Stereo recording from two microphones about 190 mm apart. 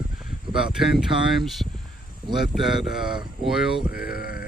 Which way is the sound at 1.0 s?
Centre (ahead or behind).